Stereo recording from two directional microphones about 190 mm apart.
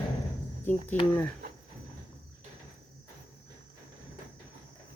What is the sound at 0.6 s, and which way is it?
Speech, 10° left (ahead or behind).